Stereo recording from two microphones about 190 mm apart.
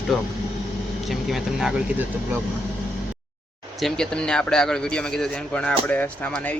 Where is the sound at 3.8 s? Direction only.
5° left (ahead or behind).